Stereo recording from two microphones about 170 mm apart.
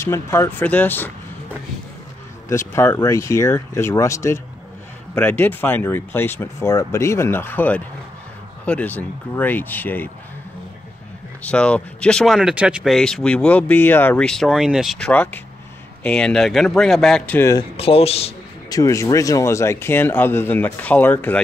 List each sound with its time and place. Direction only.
0.0 s speech: 15° left (ahead or behind)
2.5 s speech: 15° left (ahead or behind)
11.4 s speech: 5° left (ahead or behind)
17.4 s speech: 20° left (ahead or behind)
17.7 s speech: 35° left (ahead or behind)
18.7 s speech: 20° left (ahead or behind)